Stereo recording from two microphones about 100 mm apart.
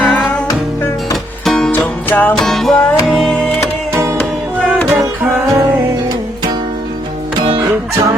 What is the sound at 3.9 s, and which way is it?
Music, 25° right (ahead or behind).